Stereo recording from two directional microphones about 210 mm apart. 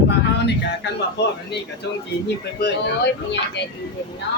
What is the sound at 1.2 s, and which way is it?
Speech, 55° left (ahead or behind).